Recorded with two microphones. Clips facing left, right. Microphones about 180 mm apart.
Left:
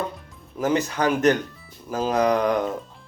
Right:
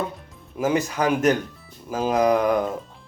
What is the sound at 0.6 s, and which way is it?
Speech, 10° right (ahead or behind).